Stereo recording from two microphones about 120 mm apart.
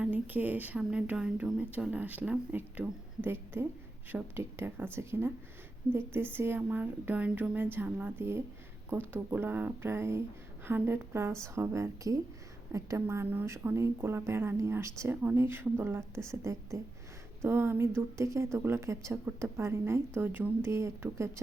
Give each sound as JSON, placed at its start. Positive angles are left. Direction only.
{"t": 0.0, "sound": "speech", "side_deg": -15}